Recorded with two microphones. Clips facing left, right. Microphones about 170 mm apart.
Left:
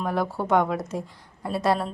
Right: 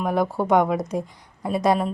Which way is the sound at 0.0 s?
15° right (ahead or behind).